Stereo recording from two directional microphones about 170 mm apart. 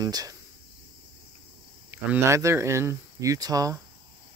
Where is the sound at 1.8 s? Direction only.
15° right (ahead or behind).